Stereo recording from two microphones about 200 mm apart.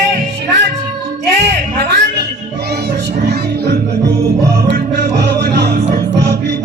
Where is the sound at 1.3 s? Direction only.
55° right (ahead or behind).